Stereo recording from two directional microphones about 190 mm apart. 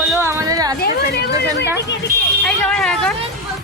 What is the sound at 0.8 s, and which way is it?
Speech, 60° left (ahead or behind).